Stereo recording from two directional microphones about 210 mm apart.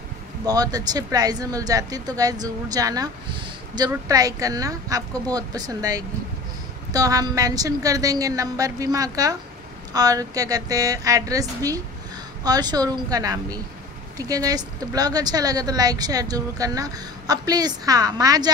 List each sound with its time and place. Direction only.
0.5 s a woman's voice: 20° right (ahead or behind)